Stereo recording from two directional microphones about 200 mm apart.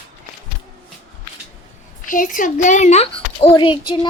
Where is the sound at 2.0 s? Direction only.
40° left (ahead or behind).